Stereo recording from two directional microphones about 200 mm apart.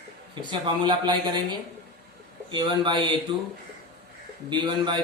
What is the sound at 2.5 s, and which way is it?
Speech, 25° right (ahead or behind).